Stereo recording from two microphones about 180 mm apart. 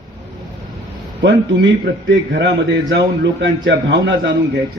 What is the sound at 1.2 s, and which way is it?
A man's voice, 80° right.